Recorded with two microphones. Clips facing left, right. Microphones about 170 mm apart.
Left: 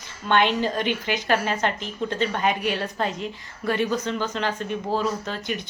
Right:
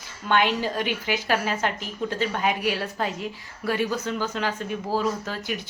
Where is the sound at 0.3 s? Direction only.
5° right (ahead or behind).